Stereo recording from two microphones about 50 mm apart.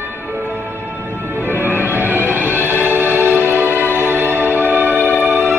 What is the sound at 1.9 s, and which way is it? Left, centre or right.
Music, right.